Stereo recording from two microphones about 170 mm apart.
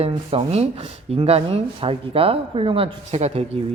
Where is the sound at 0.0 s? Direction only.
35° right (ahead or behind).